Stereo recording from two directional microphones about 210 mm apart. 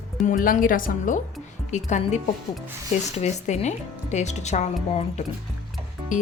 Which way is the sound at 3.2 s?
30° left (ahead or behind).